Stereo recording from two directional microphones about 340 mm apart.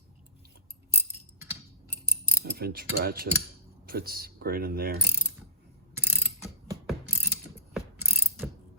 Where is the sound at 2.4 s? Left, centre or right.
Right.